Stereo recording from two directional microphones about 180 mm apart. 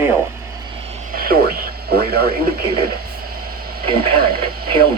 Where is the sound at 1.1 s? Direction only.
55° right (ahead or behind).